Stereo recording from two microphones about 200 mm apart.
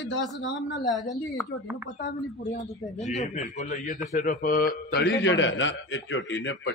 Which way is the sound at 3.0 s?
35° left (ahead or behind).